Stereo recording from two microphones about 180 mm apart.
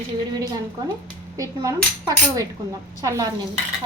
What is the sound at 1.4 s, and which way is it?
Cutlery, 20° right (ahead or behind).